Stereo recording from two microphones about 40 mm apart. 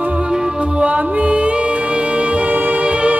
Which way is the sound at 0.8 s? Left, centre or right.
Right.